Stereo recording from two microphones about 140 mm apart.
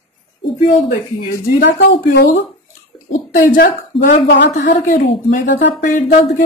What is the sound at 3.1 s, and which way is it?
A woman's voice, 75° left (ahead or behind).